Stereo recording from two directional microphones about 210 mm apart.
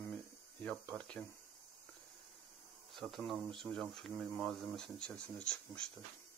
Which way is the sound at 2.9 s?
Centre (ahead or behind).